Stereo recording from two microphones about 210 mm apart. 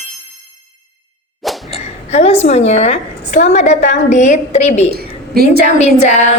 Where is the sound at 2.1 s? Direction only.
30° left (ahead or behind).